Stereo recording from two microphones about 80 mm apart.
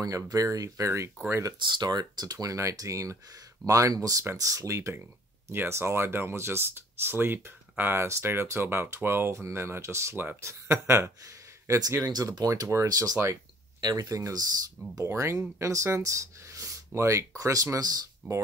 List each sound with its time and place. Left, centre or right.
0.0 s speech: right
1.7 s speech: right
2.3 s speech: right
4.2 s speech: right
12.0 s speech: right
12.4 s speech: right
13.7 s speech: right